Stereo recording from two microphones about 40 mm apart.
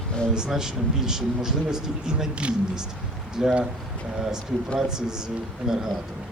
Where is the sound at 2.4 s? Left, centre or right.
Right.